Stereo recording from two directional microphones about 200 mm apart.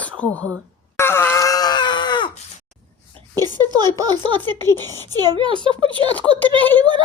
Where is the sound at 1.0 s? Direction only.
10° left (ahead or behind).